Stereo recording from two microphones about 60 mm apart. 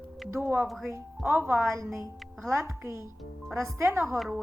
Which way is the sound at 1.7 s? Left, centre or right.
Right.